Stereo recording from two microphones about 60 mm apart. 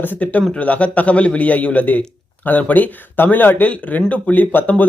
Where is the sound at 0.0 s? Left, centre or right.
Left.